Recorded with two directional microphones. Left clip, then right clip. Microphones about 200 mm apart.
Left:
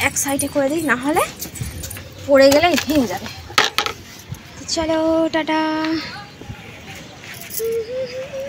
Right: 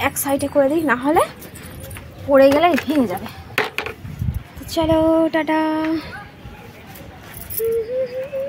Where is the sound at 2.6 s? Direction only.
10° right (ahead or behind).